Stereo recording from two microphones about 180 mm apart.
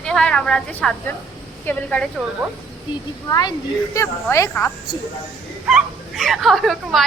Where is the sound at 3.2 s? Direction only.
20° left (ahead or behind).